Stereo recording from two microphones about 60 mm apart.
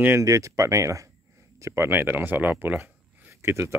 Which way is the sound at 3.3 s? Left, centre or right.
Right.